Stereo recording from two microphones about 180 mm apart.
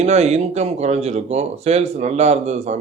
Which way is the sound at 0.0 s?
35° right (ahead or behind).